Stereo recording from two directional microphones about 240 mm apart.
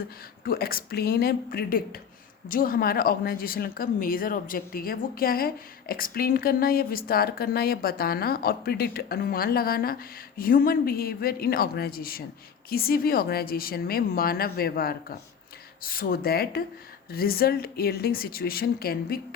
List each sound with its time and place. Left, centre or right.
0.4 s speech: left